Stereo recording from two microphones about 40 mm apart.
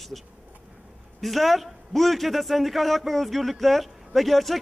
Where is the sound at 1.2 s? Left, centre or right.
Centre.